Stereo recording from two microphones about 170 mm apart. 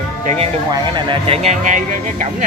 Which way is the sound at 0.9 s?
30° right (ahead or behind).